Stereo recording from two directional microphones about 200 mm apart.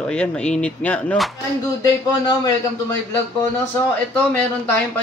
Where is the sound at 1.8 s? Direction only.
20° left (ahead or behind).